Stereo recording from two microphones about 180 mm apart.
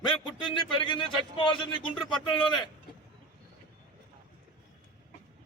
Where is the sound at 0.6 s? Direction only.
25° left (ahead or behind).